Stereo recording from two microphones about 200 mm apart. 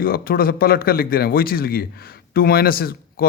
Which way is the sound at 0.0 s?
45° left (ahead or behind).